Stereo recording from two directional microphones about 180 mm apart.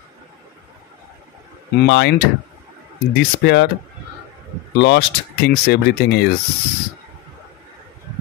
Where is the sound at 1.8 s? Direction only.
75° left (ahead or behind).